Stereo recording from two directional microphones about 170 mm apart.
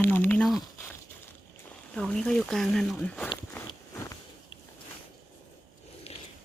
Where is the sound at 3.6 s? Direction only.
20° left (ahead or behind).